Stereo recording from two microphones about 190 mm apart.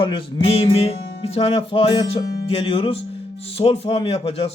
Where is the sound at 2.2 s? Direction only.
60° left (ahead or behind).